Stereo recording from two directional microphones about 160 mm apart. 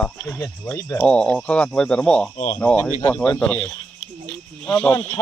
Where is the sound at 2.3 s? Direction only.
45° left (ahead or behind).